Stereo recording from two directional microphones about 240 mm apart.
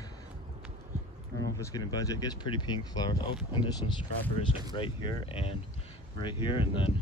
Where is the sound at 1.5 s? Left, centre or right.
Centre.